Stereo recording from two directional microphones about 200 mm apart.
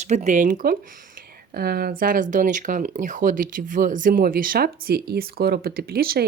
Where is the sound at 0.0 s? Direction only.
35° right (ahead or behind).